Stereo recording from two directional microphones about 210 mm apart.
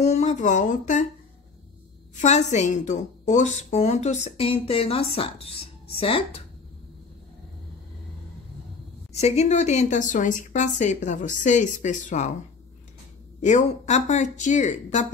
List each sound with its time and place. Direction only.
0.0 s speech: 30° left (ahead or behind)
2.1 s a woman's voice: 35° left (ahead or behind)
9.1 s a woman's voice: 30° left (ahead or behind)
13.4 s a woman's voice: 35° left (ahead or behind)